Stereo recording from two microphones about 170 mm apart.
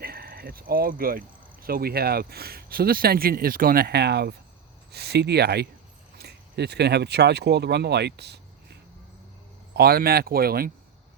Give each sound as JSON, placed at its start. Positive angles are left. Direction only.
{"t": 0.0, "sound": "speech", "side_deg": -60}
{"t": 9.7, "sound": "speech", "side_deg": -65}